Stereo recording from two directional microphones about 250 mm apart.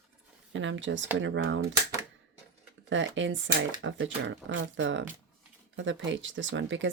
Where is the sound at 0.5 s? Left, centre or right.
Right.